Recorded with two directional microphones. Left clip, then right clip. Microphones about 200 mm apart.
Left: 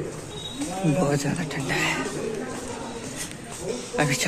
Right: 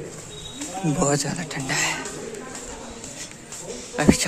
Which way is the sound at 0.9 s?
25° right (ahead or behind).